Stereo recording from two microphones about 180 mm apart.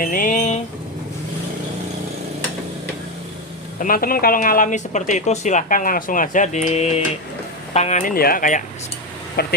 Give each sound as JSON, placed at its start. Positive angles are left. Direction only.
{"t": 0.0, "sound": "a sound", "side_deg": 50}
{"t": 3.8, "sound": "speech", "side_deg": 50}
{"t": 9.3, "sound": "speech", "side_deg": 60}